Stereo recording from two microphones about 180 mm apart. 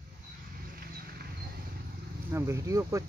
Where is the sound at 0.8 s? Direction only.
55° right (ahead or behind).